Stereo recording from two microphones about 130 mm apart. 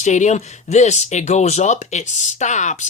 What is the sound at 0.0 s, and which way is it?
Speech, 65° left (ahead or behind).